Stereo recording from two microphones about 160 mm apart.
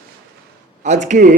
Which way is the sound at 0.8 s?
50° right (ahead or behind).